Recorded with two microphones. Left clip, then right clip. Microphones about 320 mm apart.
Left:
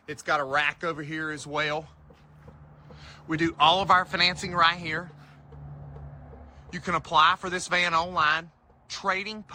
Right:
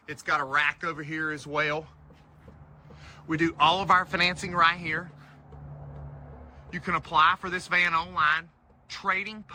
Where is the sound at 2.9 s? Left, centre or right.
Centre.